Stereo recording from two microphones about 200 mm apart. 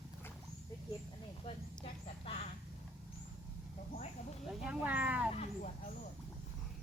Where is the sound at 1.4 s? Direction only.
30° left (ahead or behind).